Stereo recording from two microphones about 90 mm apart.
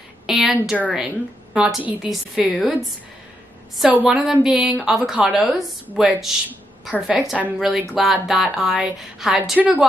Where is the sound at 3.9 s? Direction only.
10° right (ahead or behind).